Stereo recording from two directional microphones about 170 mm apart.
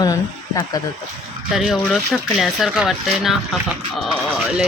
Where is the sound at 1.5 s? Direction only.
Centre (ahead or behind).